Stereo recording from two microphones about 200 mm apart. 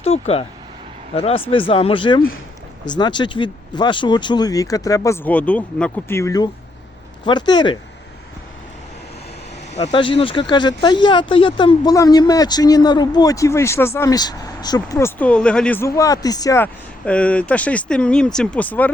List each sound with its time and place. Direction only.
0.0 s speech: 30° left (ahead or behind)
9.7 s speech: 30° left (ahead or behind); by 15.9 s 5° left (ahead or behind)
16.0 s speech: 15° left (ahead or behind)
17.1 s speech: 5° left (ahead or behind)